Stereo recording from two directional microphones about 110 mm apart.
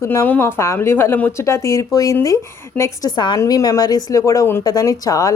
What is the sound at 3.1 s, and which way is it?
A woman's voice, 45° left (ahead or behind).